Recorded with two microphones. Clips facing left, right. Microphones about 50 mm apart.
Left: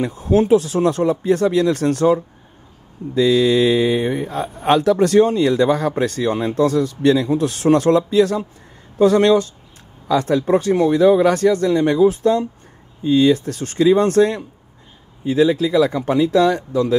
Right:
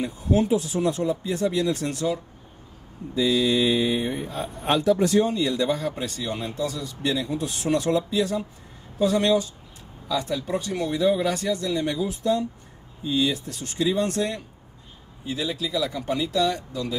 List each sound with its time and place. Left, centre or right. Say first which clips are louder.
0.0 s a man's voice: left 6 dB; left
3.2 s a man's voice: left 7 dB; left
10.4 s speech: left 11 dB; left